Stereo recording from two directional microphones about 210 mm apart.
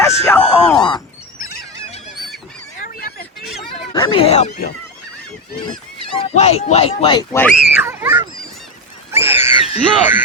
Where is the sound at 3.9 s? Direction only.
20° left (ahead or behind).